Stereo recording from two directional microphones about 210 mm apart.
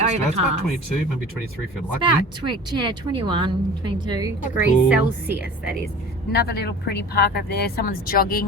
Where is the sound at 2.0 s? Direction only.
20° right (ahead or behind).